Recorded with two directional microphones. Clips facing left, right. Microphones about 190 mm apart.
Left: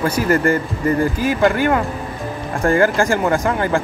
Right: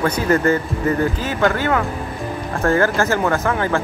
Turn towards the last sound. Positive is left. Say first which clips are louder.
# left 1 dB
turn(degrees=15)  # may be behind; listen again after turning